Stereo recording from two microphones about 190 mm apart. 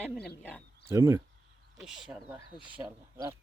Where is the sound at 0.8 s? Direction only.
15° right (ahead or behind).